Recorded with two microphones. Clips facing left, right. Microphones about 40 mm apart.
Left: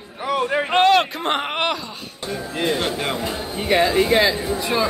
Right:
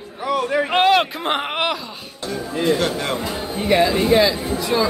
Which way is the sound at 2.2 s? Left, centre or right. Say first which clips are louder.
Right 3 dB; centre.